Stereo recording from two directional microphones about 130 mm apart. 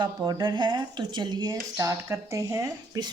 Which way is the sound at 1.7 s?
25° right (ahead or behind).